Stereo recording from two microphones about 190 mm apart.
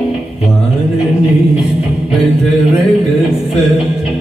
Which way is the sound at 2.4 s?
35° left (ahead or behind).